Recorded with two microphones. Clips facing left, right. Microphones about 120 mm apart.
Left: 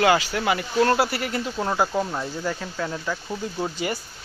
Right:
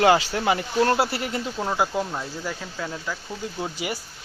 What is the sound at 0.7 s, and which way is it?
Speech, 10° right (ahead or behind).